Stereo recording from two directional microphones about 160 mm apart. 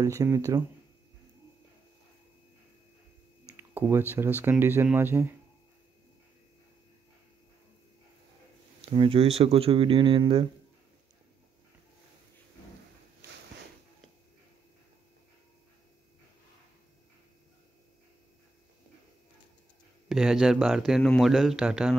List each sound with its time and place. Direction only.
0.0 s speech: 20° right (ahead or behind)
3.5 s speech: 10° right (ahead or behind)
8.8 s speech: 35° right (ahead or behind)
20.1 s speech: 5° right (ahead or behind)